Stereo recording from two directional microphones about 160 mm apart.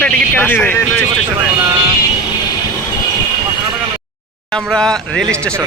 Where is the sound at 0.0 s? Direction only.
10° left (ahead or behind).